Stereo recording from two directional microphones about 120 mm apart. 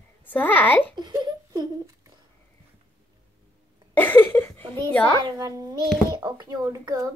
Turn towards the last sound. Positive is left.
turn(degrees=-25)  # may be behind; listen again after turning